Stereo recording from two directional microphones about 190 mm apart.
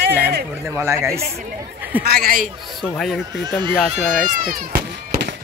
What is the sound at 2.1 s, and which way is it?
Speech, 50° right (ahead or behind).